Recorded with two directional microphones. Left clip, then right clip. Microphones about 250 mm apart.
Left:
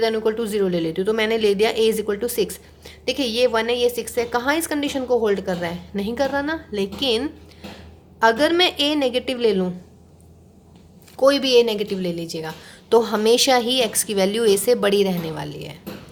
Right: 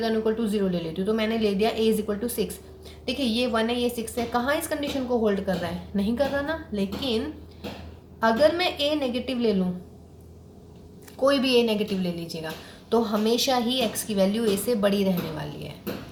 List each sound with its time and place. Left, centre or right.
0.0 s speech: left
11.2 s speech: left